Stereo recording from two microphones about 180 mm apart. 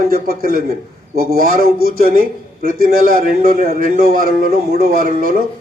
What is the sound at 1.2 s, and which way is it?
Speech, 55° right (ahead or behind).